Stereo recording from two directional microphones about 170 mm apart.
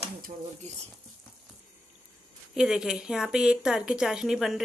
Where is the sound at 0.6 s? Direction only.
45° right (ahead or behind).